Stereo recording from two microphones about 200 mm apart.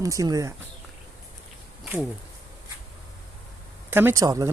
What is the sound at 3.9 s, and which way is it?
Speech, 10° right (ahead or behind).